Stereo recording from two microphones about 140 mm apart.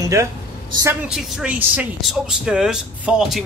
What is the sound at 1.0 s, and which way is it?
Speech, 5° right (ahead or behind).